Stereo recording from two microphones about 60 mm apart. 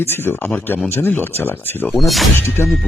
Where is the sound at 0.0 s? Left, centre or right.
Left.